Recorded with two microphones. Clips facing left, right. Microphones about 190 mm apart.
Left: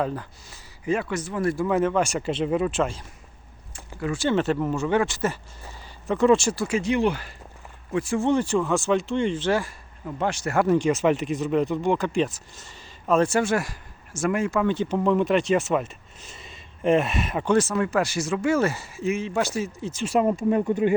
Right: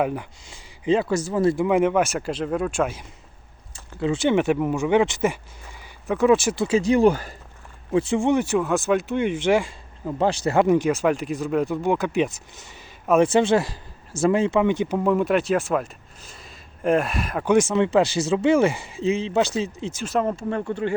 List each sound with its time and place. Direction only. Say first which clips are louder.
0.0 s speech: right 3 dB; 15° right (ahead or behind)
1.3 s speech: right 3 dB; 25° right (ahead or behind)
2.0 s speech: left 1 dB; centre (ahead or behind)
4.0 s speech: right 3 dB; 20° right (ahead or behind)
6.1 s speech: right 1 dB; centre (ahead or behind)
6.7 s speech: right 7 dB; 40° right (ahead or behind)
8.2 s speech: right 1 dB; 10° right (ahead or behind)
10.1 s speech: right 5 dB; 30° right (ahead or behind)
10.8 s speech: even; centre (ahead or behind)
17.4 s speech: right 4 dB; 15° right (ahead or behind)
20.1 s speech: left 3 dB; 10° left (ahead or behind)